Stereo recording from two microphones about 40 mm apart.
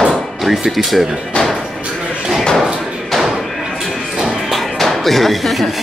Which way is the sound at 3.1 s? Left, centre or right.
Centre.